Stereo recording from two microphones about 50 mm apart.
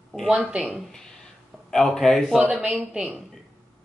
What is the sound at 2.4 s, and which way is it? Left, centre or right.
Speech, right.